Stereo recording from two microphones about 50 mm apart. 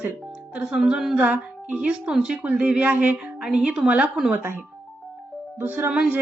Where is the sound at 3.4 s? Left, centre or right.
Centre.